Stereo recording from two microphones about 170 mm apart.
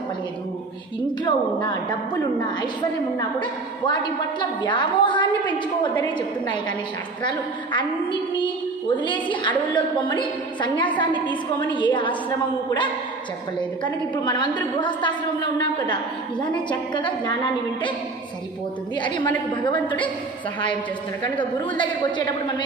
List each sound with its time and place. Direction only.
1.2 s a woman's voice: 25° left (ahead or behind)
3.2 s a woman's voice: 25° left (ahead or behind)
13.6 s a woman's voice: 25° left (ahead or behind)
18.9 s a woman's voice: 25° left (ahead or behind)
21.6 s a woman's voice: 25° left (ahead or behind)